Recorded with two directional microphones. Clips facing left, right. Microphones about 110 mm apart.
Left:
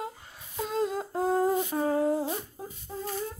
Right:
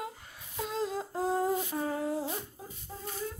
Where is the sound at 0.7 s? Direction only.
55° left (ahead or behind).